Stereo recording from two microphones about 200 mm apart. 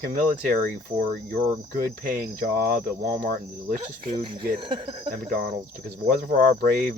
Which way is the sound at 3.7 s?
25° right (ahead or behind).